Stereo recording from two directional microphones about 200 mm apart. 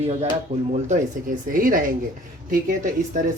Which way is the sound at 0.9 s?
40° right (ahead or behind).